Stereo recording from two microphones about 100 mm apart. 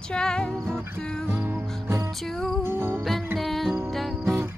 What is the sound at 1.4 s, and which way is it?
Music, 20° right (ahead or behind).